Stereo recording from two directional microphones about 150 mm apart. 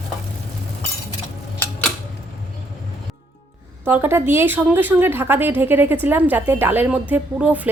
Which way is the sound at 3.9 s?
15° right (ahead or behind).